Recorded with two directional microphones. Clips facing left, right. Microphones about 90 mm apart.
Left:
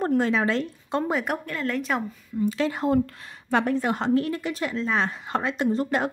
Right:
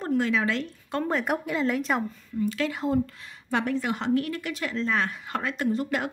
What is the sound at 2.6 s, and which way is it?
Speech, 30° left (ahead or behind).